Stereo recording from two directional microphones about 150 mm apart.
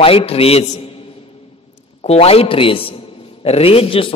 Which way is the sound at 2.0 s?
40° left (ahead or behind).